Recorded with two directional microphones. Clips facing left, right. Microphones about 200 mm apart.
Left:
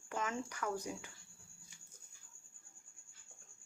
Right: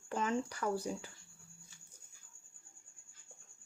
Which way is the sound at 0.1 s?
30° right (ahead or behind).